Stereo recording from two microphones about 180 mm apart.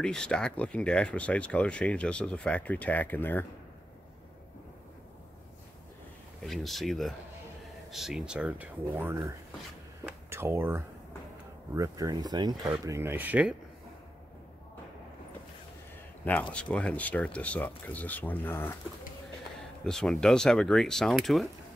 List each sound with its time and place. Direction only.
0.0 s speech: 5° left (ahead or behind)
6.4 s speech: centre (ahead or behind); by 9.3 s 15° right (ahead or behind)
10.3 s speech: 10° right (ahead or behind)
16.3 s speech: 5° left (ahead or behind)
19.8 s speech: 5° left (ahead or behind)